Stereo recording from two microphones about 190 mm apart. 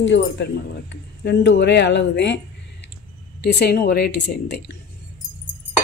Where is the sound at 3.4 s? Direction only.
60° left (ahead or behind).